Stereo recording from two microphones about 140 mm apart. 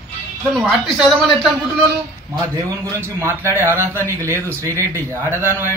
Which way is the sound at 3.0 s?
20° right (ahead or behind).